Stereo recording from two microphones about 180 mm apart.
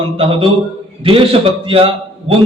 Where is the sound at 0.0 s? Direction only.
30° right (ahead or behind).